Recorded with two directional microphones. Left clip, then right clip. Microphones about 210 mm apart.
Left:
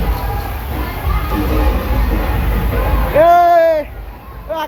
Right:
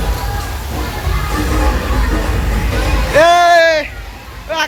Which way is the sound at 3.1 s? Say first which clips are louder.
Right 1 dB; 5° left (ahead or behind).